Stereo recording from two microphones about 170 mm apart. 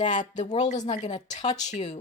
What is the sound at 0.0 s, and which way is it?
Speech, 45° left (ahead or behind).